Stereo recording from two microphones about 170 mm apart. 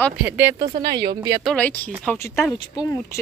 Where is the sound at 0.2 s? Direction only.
15° right (ahead or behind).